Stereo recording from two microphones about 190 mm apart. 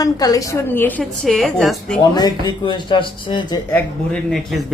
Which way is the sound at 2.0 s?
20° left (ahead or behind).